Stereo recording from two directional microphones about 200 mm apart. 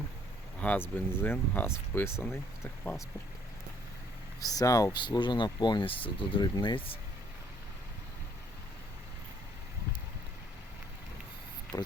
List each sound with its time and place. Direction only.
0.6 s speech: 10° left (ahead or behind)
4.4 s speech: 20° left (ahead or behind)
11.7 s a sound: 20° left (ahead or behind)